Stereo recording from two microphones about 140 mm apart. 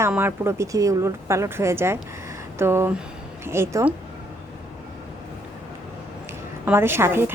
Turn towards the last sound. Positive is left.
turn(degrees=-15)  # may be behind; listen again after turning